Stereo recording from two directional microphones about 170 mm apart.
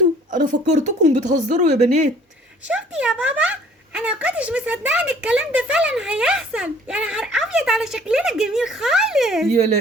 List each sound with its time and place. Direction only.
0.3 s a woman's voice: 45° right (ahead or behind)
2.6 s speech: 5° right (ahead or behind)